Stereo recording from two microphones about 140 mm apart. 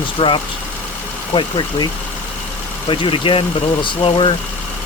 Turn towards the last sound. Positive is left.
turn(degrees=40)  # may be behind; listen again after turning